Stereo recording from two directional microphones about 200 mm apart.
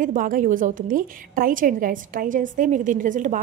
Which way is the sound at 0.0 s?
40° right (ahead or behind).